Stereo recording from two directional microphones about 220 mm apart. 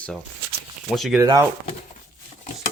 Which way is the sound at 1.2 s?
15° right (ahead or behind).